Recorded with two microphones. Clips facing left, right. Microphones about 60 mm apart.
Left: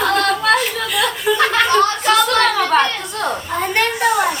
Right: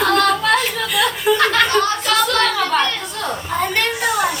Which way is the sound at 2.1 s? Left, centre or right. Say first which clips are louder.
Left 1 dB; left.